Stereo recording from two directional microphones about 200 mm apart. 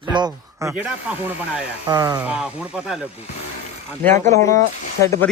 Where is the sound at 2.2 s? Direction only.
5° right (ahead or behind).